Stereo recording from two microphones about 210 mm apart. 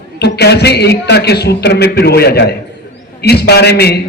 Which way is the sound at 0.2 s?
50° left (ahead or behind).